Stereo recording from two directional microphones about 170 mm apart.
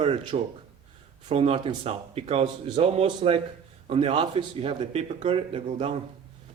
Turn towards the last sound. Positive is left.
turn(degrees=-35)  # may be behind; listen again after turning